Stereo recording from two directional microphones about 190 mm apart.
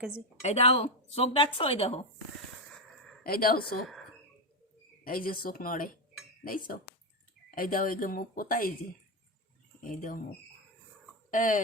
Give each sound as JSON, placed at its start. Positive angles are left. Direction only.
{"t": 0.4, "sound": "speech", "side_deg": 35}
{"t": 3.2, "sound": "speech", "side_deg": 50}
{"t": 5.0, "sound": "speech", "side_deg": 50}
{"t": 7.5, "sound": "speech", "side_deg": 50}
{"t": 9.9, "sound": "speech", "side_deg": 45}
{"t": 11.3, "sound": "speech", "side_deg": 45}